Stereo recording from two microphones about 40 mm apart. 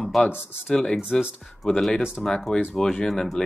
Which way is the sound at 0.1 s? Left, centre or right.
Centre.